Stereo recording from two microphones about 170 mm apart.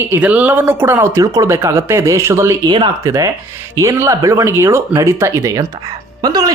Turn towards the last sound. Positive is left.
turn(degrees=-25)  # may be behind; listen again after turning